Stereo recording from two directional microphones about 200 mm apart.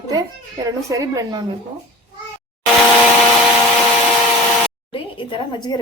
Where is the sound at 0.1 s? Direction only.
15° right (ahead or behind).